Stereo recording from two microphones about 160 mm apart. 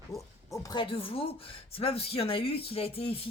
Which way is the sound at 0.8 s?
35° left (ahead or behind).